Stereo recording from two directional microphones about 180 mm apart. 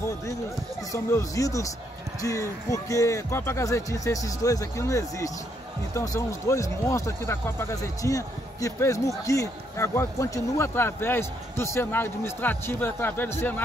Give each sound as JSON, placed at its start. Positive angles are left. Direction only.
{"t": 0.9, "sound": "speech", "side_deg": 15}